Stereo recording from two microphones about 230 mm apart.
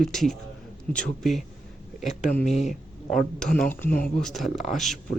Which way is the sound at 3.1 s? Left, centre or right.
Centre.